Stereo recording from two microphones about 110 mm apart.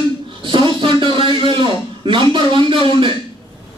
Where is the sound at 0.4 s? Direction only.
50° right (ahead or behind).